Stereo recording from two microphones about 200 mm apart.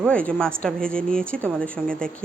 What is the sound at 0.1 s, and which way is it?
Speech, 5° left (ahead or behind).